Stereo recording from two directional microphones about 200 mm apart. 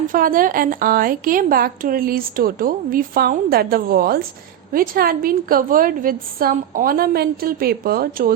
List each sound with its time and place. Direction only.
0.1 s a woman's voice: 45° right (ahead or behind)